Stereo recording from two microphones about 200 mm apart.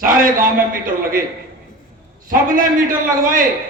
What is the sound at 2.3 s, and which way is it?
Speech, 45° right (ahead or behind).